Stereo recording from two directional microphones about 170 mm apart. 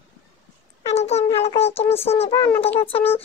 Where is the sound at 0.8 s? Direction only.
40° left (ahead or behind).